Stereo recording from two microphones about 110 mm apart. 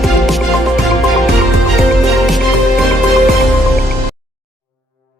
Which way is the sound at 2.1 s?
Centre (ahead or behind).